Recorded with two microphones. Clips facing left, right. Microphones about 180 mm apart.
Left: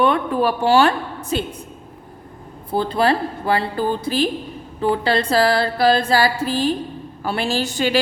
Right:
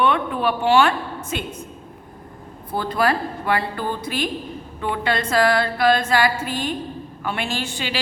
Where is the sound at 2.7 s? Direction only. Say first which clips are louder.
Left 3 dB; 25° left (ahead or behind).